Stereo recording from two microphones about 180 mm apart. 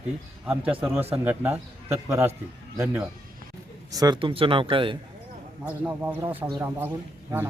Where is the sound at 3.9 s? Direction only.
20° right (ahead or behind).